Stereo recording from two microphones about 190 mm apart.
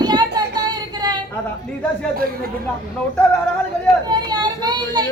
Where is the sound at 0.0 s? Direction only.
20° right (ahead or behind).